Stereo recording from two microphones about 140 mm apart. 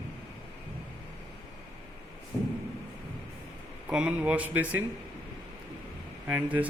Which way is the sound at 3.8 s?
5° right (ahead or behind).